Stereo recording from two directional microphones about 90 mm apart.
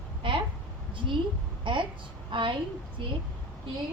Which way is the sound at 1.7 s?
65° right (ahead or behind).